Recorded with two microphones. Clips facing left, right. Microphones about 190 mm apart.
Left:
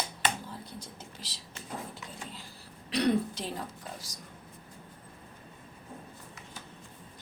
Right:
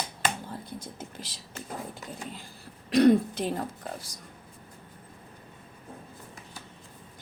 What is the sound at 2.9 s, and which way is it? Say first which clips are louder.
Speech: right 8 dB; 45° right (ahead or behind).